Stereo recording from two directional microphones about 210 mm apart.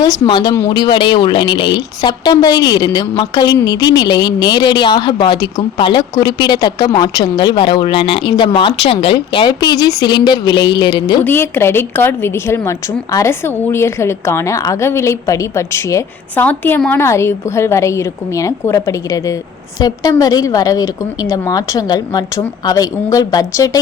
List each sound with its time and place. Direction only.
0.0 s speech: 20° left (ahead or behind)
11.2 s a woman's voice: 10° left (ahead or behind)